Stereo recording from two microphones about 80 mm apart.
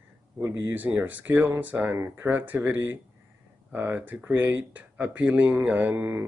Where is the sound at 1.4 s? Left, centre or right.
Right.